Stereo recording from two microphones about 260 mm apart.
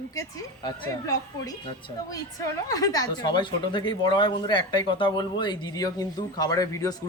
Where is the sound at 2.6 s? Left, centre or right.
Centre.